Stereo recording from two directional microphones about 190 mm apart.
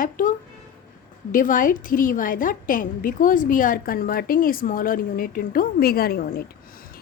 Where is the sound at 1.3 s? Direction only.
45° left (ahead or behind).